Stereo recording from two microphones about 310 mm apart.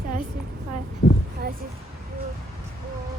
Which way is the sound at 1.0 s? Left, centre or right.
Left.